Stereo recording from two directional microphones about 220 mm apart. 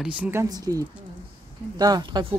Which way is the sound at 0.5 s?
15° right (ahead or behind).